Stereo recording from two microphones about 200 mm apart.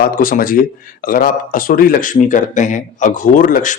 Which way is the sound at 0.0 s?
45° left (ahead or behind).